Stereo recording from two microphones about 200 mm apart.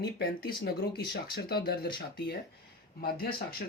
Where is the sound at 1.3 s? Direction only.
50° left (ahead or behind).